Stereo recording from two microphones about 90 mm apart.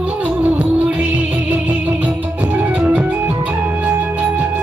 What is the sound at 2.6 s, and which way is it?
Organ, 15° right (ahead or behind).